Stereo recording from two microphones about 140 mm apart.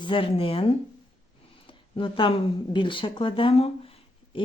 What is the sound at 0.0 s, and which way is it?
Speech, 40° left (ahead or behind).